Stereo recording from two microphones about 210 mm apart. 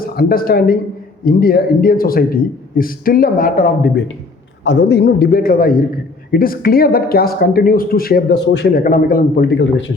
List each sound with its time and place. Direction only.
0.0 s speech: 45° left (ahead or behind)
4.6 s speech: 55° left (ahead or behind)